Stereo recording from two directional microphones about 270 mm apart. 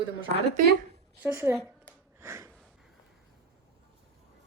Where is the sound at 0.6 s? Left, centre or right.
Right.